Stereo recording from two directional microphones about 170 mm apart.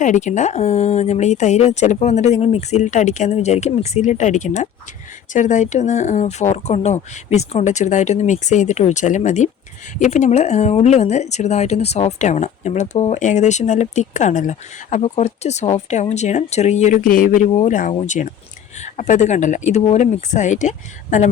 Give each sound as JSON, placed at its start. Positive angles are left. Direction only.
{"t": 0.0, "sound": "speech", "side_deg": 45}